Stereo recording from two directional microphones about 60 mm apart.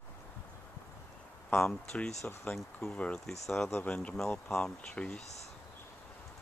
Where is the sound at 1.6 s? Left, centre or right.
Centre.